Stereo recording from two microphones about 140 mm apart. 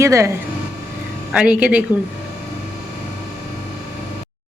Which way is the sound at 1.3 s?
10° right (ahead or behind).